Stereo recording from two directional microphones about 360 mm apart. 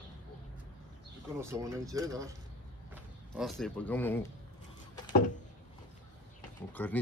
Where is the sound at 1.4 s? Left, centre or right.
Centre.